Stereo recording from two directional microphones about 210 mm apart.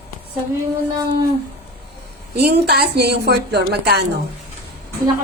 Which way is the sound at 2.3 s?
50° right (ahead or behind).